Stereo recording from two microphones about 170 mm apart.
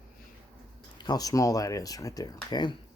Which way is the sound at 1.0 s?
20° left (ahead or behind).